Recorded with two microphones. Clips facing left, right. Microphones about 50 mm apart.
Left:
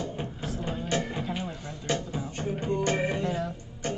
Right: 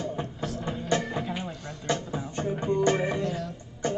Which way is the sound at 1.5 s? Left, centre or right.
Centre.